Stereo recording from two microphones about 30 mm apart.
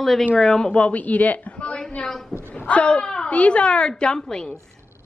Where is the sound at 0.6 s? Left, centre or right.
Left.